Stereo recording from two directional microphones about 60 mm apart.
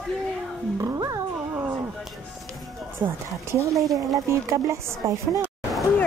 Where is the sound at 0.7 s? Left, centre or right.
Right.